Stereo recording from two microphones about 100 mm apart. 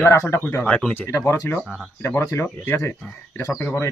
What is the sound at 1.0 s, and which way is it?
Speech, 30° left (ahead or behind).